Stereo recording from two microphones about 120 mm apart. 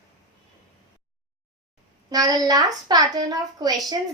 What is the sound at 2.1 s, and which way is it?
A woman's voice, 30° right (ahead or behind).